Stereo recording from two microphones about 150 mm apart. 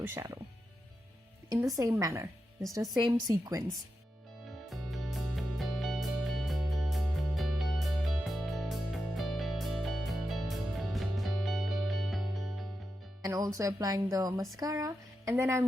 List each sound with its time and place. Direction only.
0.0 s speech: 15° right (ahead or behind)
1.5 s a woman's voice: 20° right (ahead or behind)
4.7 s music: centre (ahead or behind)
13.2 s a woman's voice: 20° right (ahead or behind)